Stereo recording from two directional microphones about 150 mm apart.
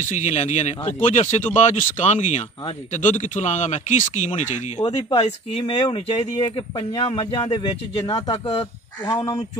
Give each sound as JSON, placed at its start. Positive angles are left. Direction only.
{"t": 0.0, "sound": "speech", "side_deg": 55}
{"t": 4.7, "sound": "speech", "side_deg": 30}
{"t": 5.2, "sound": "speech", "side_deg": 45}
{"t": 9.0, "sound": "speech", "side_deg": 25}